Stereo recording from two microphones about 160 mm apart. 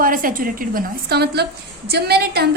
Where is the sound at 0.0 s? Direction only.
60° right (ahead or behind).